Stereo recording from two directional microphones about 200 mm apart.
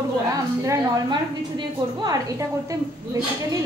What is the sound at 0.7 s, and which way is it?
A woman's voice, 20° right (ahead or behind).